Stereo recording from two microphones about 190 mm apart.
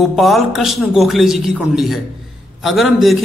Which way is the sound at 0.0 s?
Centre (ahead or behind).